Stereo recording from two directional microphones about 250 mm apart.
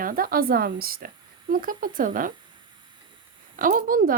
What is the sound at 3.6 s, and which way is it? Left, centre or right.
Speech, right.